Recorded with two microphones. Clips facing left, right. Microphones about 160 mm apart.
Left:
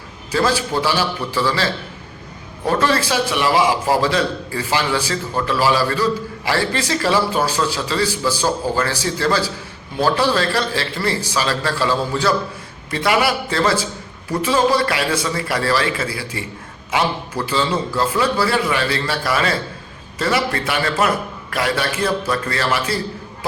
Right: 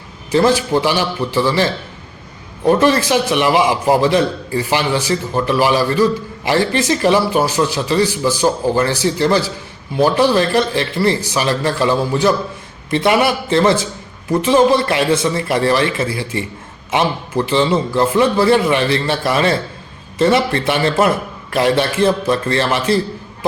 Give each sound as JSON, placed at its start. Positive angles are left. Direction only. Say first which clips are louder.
{"t": 0.3, "sound": "a man's voice", "louder": "right 5 dB", "side_deg": -20}
{"t": 2.6, "sound": "a man's voice", "louder": "right 5 dB", "side_deg": -15}